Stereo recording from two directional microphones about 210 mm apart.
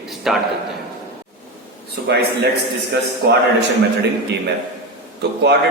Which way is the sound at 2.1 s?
50° right (ahead or behind).